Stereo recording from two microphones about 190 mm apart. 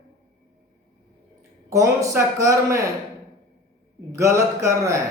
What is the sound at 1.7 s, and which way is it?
A woman's voice, 15° right (ahead or behind).